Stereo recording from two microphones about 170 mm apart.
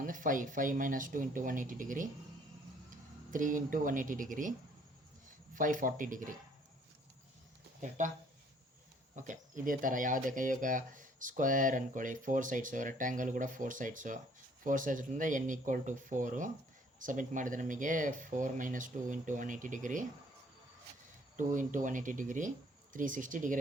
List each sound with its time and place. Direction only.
0.0 s speech: 50° right (ahead or behind)
3.3 s speech: 50° right (ahead or behind)
5.5 s speech: 50° right (ahead or behind)
7.8 s speech: 45° right (ahead or behind)
9.1 s speech: 50° right (ahead or behind)
21.3 s speech: 50° right (ahead or behind)